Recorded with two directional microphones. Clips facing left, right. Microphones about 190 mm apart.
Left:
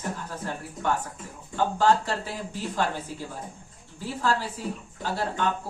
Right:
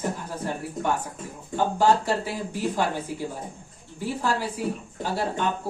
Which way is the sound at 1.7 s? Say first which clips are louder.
Right 2 dB; 10° right (ahead or behind).